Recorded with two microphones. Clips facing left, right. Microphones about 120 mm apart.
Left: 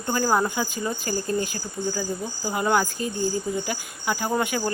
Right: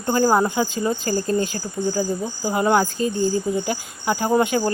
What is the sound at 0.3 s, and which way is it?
Cricket, 20° right (ahead or behind).